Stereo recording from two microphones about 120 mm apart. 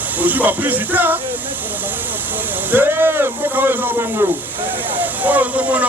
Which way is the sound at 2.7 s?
15° right (ahead or behind).